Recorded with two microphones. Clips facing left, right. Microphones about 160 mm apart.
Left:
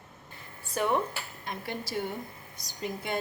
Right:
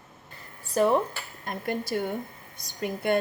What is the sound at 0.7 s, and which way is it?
Speech, 35° right (ahead or behind).